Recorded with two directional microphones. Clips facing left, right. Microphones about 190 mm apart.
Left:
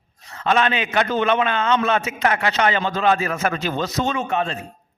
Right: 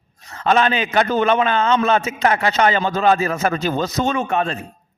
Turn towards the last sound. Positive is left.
turn(degrees=-55)  # may be behind; listen again after turning